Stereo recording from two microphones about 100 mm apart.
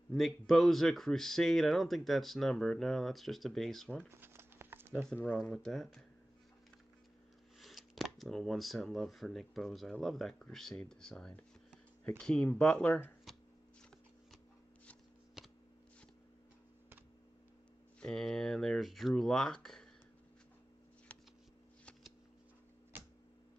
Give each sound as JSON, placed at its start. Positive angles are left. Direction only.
{"t": 0.1, "sound": "speech", "side_deg": 0}
{"t": 4.1, "sound": "a sound", "side_deg": -25}
{"t": 5.1, "sound": "speech", "side_deg": 15}
{"t": 5.5, "sound": "speech", "side_deg": 5}
{"t": 7.6, "sound": "speech", "side_deg": 0}
{"t": 15.4, "sound": "shuffling cards", "side_deg": 0}
{"t": 18.0, "sound": "speech", "side_deg": 5}